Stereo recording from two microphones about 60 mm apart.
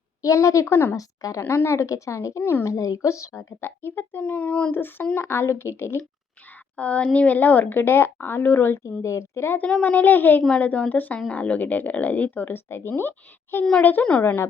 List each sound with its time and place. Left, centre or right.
0.2 s speech: left
0.9 s a woman's voice: left
1.5 s speech: left
2.4 s a woman's voice: left
2.6 s speech: left
3.6 s a woman's voice: left
4.2 s speech: left
4.7 s a woman's voice: left
6.7 s a woman's voice: left
8.8 s speech: left
9.8 s a woman's voice: left